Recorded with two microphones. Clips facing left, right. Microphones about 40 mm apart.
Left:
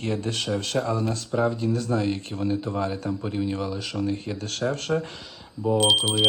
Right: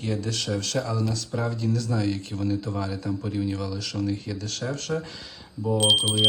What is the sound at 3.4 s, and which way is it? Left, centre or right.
Speech, left.